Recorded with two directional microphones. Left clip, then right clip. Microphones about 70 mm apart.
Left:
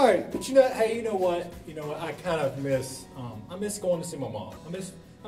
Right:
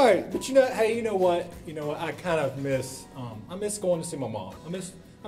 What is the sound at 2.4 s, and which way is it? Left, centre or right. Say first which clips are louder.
Speech: left 1 dB; centre.